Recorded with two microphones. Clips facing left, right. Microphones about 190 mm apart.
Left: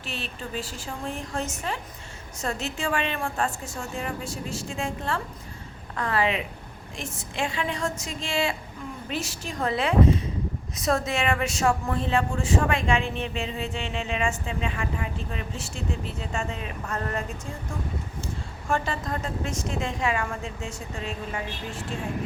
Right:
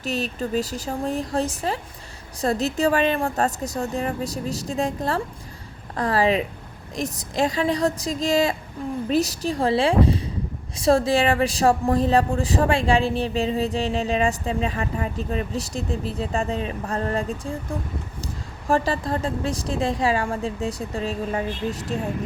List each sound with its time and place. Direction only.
0.0 s a woman's voice: 40° right (ahead or behind)
18.7 s a woman's voice: 35° right (ahead or behind)